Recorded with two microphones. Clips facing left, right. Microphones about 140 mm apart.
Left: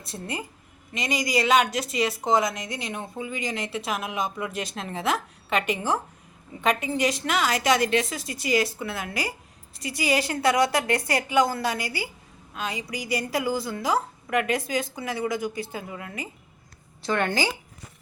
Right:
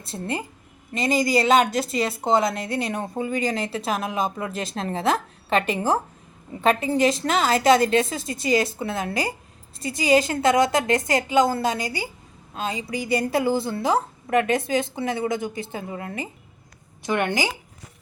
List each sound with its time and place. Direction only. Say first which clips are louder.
0.0 s a woman's voice: right 4 dB; 30° right (ahead or behind)
17.0 s a woman's voice: right 1 dB; 15° right (ahead or behind)